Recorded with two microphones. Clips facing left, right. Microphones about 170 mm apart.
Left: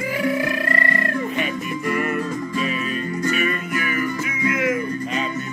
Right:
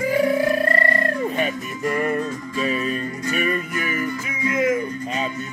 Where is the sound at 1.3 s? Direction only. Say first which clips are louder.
Even; 40° right (ahead or behind).